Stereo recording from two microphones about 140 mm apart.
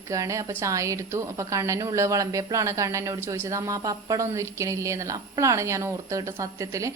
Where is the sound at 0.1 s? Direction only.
20° right (ahead or behind).